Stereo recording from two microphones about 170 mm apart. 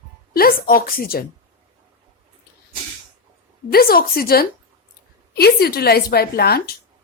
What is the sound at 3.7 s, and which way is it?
A woman's voice, 60° left (ahead or behind).